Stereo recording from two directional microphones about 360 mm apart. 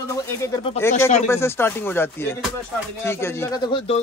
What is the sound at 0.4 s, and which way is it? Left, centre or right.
Speech, centre.